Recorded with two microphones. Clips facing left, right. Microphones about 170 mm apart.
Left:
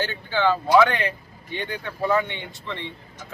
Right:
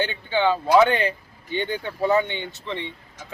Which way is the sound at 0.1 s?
20° right (ahead or behind).